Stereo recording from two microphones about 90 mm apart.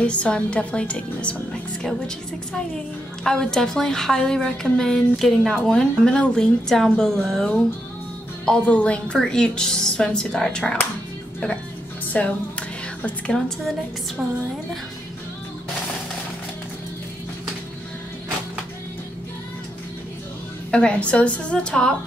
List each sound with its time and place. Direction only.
0.0 s a woman's voice: 15° left (ahead or behind)
12.1 s music: 15° left (ahead or behind)
20.7 s a woman's voice: 10° left (ahead or behind)